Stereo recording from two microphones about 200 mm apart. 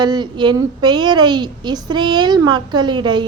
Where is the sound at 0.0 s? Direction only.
20° right (ahead or behind).